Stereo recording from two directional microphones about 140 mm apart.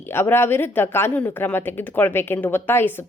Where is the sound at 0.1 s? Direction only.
15° left (ahead or behind).